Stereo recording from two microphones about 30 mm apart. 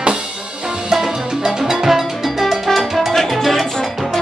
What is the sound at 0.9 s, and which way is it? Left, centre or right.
Music, centre.